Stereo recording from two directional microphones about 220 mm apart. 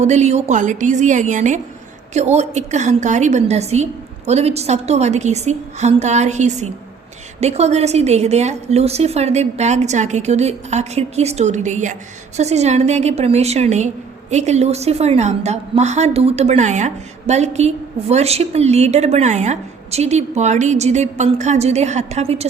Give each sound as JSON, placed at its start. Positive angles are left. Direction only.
{"t": 0.0, "sound": "a woman's voice", "side_deg": -30}